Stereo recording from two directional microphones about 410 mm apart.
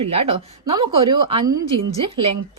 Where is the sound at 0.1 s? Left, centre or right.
Centre.